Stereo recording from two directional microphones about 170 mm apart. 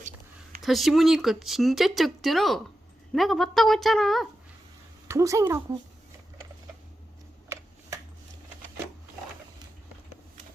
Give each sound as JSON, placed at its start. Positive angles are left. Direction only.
{"t": 0.6, "sound": "speech", "side_deg": 0}
{"t": 5.0, "sound": "speech", "side_deg": -15}